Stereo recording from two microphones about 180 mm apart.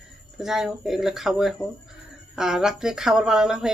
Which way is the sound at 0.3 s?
Centre (ahead or behind).